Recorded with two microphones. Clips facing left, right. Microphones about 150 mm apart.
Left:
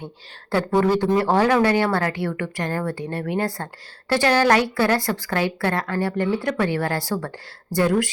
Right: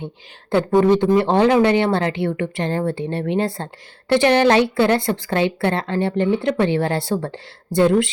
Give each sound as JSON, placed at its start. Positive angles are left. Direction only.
{"t": 0.5, "sound": "a woman's voice", "side_deg": -20}